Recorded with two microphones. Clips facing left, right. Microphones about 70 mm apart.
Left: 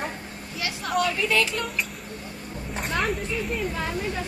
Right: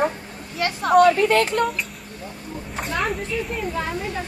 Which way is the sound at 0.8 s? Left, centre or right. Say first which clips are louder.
Right 11 dB; right.